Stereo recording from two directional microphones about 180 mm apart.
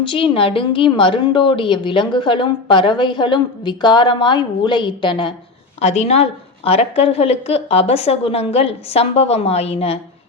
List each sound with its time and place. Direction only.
0.0 s a woman's voice: 30° left (ahead or behind)
5.8 s a woman's voice: 35° left (ahead or behind)